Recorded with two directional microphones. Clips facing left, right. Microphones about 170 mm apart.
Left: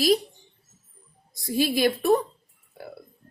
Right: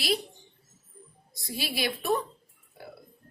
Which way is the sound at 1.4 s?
45° left (ahead or behind).